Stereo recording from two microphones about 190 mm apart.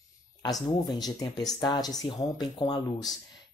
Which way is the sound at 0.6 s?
20° left (ahead or behind).